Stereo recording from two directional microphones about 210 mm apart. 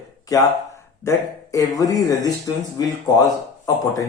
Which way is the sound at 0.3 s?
15° left (ahead or behind).